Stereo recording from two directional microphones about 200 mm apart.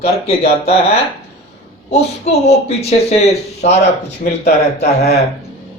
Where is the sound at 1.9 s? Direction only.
30° left (ahead or behind).